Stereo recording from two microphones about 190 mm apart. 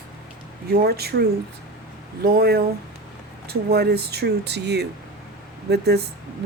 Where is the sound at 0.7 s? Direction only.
55° right (ahead or behind).